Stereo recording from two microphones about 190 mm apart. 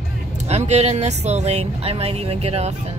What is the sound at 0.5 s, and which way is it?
Speech, 35° right (ahead or behind).